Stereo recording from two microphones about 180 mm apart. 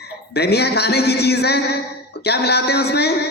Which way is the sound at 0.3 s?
65° left (ahead or behind).